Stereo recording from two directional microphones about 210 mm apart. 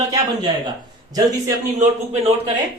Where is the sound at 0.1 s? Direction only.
20° right (ahead or behind).